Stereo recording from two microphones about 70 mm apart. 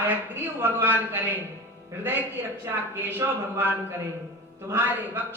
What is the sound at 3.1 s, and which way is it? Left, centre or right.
Speech, right.